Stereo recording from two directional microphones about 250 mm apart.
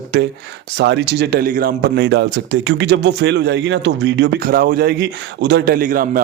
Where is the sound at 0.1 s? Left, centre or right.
Right.